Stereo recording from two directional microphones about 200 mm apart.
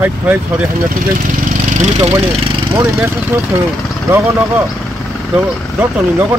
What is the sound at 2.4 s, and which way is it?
Speech, 20° right (ahead or behind).